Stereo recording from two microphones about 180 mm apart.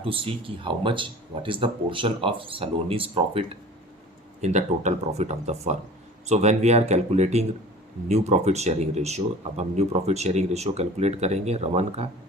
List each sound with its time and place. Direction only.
0.0 s speech: 30° right (ahead or behind)